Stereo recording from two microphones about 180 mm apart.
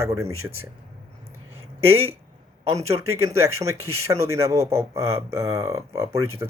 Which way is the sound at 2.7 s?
15° right (ahead or behind).